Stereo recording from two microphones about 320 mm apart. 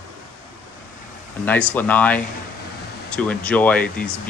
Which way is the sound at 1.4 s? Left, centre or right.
Centre.